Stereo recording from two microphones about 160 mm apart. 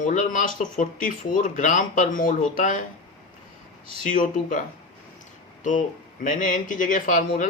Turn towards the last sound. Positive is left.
turn(degrees=55)  # may be behind; listen again after turning